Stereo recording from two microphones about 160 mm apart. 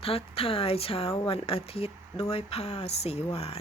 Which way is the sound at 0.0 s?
35° left (ahead or behind).